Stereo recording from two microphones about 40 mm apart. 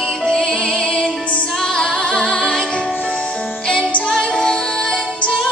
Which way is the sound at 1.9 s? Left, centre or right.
Left.